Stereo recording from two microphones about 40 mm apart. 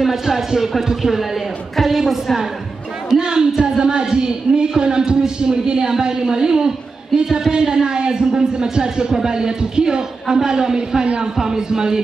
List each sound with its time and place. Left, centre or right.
0.0 s a woman's voice: centre
3.2 s speech: centre